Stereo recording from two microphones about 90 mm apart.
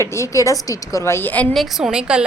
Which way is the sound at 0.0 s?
30° left (ahead or behind).